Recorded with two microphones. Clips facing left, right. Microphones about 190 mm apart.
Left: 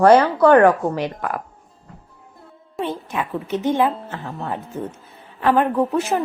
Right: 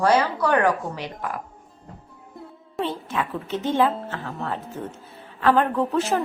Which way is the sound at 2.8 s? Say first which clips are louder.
Left 2 dB; 15° left (ahead or behind).